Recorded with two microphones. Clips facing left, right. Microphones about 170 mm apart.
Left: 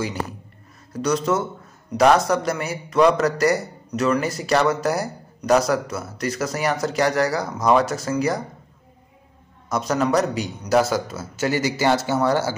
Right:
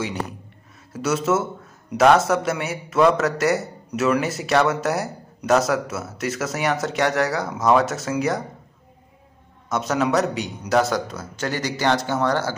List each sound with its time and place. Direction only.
0.9 s a man's voice: 5° right (ahead or behind)
9.7 s a man's voice: centre (ahead or behind)